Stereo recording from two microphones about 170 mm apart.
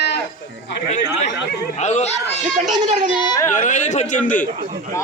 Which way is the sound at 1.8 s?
40° left (ahead or behind).